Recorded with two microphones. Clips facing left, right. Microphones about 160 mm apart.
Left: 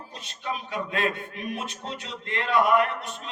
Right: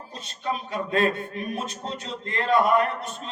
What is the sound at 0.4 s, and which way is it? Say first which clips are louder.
Mantra: right 3 dB; 40° right (ahead or behind).